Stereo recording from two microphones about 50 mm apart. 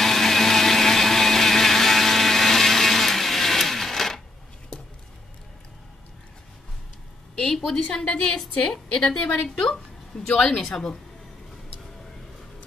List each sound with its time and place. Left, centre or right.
0.0 s blender: centre
7.3 s a sound: centre
7.9 s a woman's voice: left